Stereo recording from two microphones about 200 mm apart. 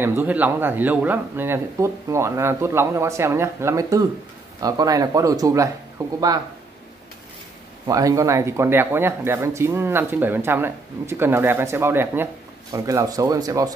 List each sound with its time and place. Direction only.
0.0 s speech: 10° right (ahead or behind)
7.8 s speech: 15° right (ahead or behind)